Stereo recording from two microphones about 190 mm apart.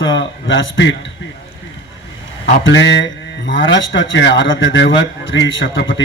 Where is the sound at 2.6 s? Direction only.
75° left (ahead or behind).